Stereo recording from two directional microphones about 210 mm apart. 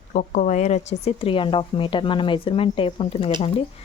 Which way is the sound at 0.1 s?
35° left (ahead or behind).